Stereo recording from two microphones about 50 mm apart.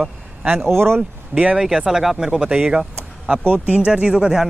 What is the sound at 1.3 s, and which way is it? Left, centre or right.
Speech, right.